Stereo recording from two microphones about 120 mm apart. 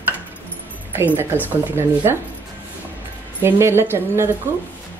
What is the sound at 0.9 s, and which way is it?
Speech, 15° right (ahead or behind).